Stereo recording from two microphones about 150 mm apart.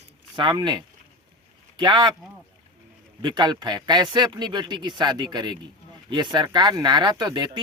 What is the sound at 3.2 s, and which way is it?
Speech, 30° right (ahead or behind).